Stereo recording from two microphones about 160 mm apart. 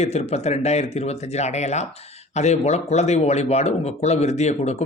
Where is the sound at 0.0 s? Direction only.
40° left (ahead or behind).